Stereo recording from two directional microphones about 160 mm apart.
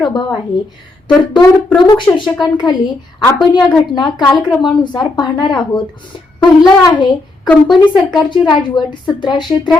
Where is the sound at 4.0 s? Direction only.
25° left (ahead or behind).